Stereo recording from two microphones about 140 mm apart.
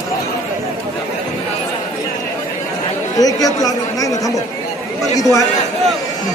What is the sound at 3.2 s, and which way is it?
Speech, 25° left (ahead or behind).